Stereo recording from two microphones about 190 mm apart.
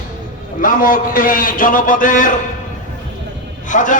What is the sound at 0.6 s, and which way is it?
A man's voice, 45° left (ahead or behind).